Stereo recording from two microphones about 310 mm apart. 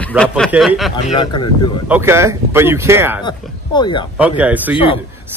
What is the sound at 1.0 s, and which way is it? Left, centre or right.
Speech, centre.